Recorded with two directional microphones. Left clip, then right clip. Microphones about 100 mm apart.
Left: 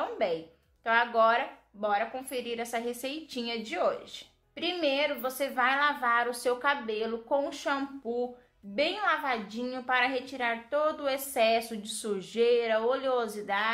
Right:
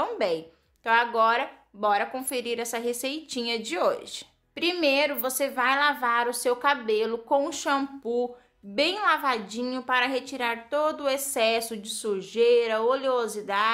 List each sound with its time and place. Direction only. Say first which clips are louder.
0.0 s a sound: right 4 dB; 40° right (ahead or behind)
0.8 s a woman's voice: right 3 dB; 25° right (ahead or behind)
1.8 s a woman's voice: right 5 dB; 45° right (ahead or behind)
5.4 s a woman's voice: right 3 dB; 25° right (ahead or behind)